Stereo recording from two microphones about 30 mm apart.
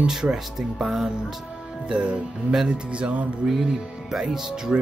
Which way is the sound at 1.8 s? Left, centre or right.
Right.